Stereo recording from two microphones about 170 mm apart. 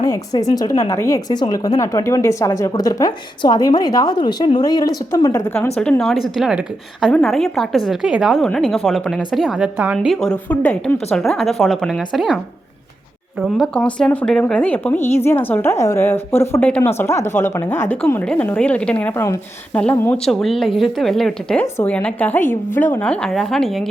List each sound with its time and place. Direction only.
0.0 s speech: 20° left (ahead or behind)
5.5 s a woman's voice: 5° left (ahead or behind)
13.4 s a woman's voice: 5° left (ahead or behind)